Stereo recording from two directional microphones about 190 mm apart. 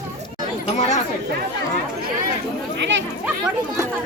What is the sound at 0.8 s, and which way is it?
Speech, 40° left (ahead or behind).